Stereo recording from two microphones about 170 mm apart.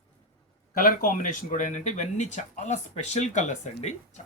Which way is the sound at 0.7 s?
55° left (ahead or behind).